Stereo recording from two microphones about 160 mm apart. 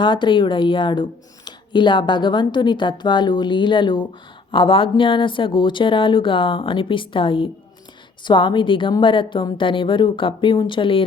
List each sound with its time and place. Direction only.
0.0 s speech: 30° left (ahead or behind)